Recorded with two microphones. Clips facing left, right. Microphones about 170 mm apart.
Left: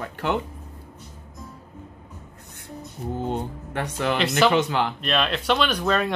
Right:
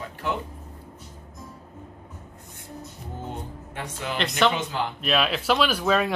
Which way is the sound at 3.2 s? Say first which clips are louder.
Left 7 dB; 70° left (ahead or behind).